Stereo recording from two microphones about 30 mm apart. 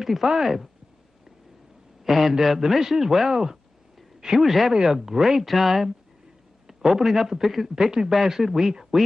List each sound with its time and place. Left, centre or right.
0.0 s a man's voice: centre
2.0 s a man's voice: centre
4.4 s a man's voice: centre